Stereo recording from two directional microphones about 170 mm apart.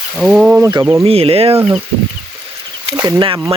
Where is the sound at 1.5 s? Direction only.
15° right (ahead or behind).